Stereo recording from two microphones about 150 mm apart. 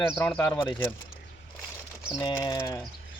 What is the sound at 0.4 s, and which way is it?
Speech, 15° left (ahead or behind).